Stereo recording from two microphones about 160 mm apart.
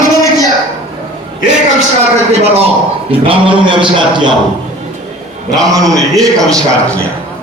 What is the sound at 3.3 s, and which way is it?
A man's voice, 30° right (ahead or behind).